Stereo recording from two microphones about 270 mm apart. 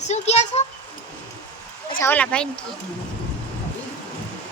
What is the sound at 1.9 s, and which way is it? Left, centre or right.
Speech, centre.